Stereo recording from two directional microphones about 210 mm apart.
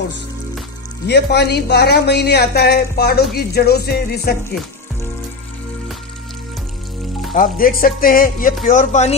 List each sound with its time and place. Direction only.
1.0 s speech: 50° left (ahead or behind)
7.3 s speech: 40° left (ahead or behind)